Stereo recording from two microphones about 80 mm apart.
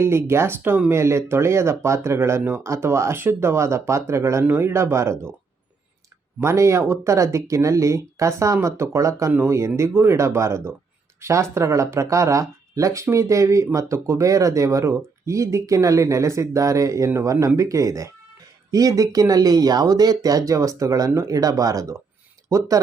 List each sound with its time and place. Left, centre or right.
0.0 s speech: right
6.4 s speech: right